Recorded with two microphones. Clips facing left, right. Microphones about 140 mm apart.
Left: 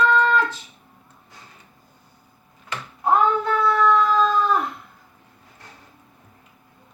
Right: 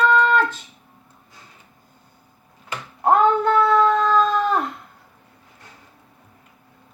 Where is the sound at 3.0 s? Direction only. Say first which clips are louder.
Right 3 dB; 60° right (ahead or behind).